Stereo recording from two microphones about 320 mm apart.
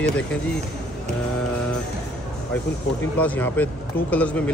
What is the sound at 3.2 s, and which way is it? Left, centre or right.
Speech, centre.